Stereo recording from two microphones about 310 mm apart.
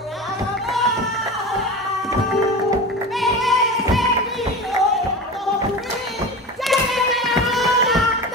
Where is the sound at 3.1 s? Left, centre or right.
Centre.